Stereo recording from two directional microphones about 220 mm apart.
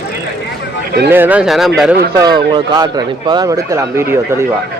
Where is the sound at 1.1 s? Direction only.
10° right (ahead or behind).